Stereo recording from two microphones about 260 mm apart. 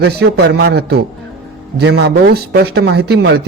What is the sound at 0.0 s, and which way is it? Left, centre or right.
Speech, right.